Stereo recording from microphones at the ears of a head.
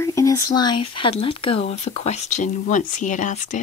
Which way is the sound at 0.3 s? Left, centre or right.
Left.